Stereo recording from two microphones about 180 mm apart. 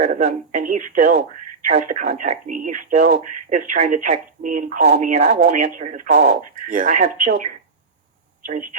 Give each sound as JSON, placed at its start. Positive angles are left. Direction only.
{"t": 0.0, "sound": "speech", "side_deg": -45}